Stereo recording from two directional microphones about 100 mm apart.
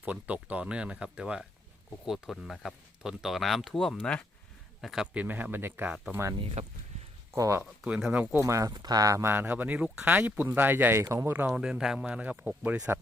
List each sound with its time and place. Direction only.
0.0 s speech: 15° right (ahead or behind); by 4.3 s 10° left (ahead or behind)
4.8 s a man's voice: centre (ahead or behind)
5.1 s speech: 15° right (ahead or behind)
6.6 s speech: 90° right
7.3 s speech: 30° right (ahead or behind)
8.1 s speech: 15° right (ahead or behind)
8.4 s speech: 30° right (ahead or behind)
9.2 s speech: 20° right (ahead or behind)
11.0 s speech: 35° right (ahead or behind)
11.3 s speech: 20° right (ahead or behind)
11.6 s speech: 5° right (ahead or behind)